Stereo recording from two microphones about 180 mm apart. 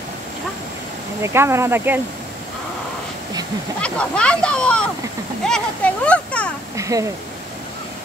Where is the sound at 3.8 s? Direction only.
5° left (ahead or behind).